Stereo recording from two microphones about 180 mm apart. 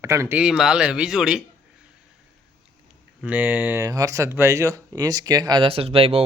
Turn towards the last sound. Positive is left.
turn(degrees=-35)  # may be behind; listen again after turning